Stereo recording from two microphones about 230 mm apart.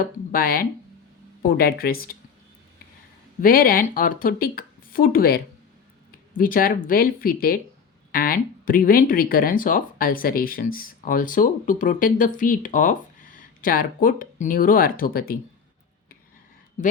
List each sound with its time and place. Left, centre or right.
0.0 s speech: left
3.4 s speech: left
16.8 s speech: left